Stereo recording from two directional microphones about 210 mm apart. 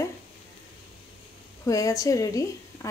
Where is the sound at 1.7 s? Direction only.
15° left (ahead or behind).